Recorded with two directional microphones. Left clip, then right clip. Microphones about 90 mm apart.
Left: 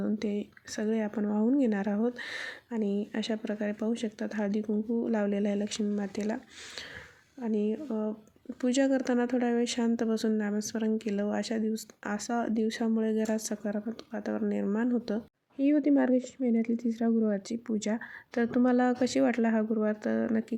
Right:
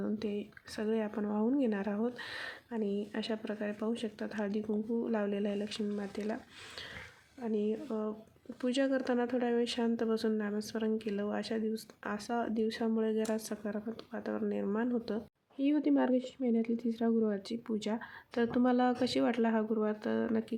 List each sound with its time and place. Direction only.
0.0 s speech: 30° left (ahead or behind)